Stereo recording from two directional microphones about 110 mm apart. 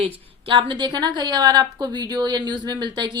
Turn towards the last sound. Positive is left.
turn(degrees=-45)  # may be behind; listen again after turning